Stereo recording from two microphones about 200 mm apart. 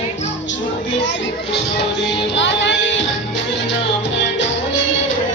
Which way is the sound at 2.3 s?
65° left (ahead or behind).